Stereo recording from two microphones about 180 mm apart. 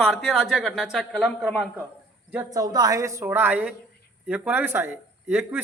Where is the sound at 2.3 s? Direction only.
10° right (ahead or behind).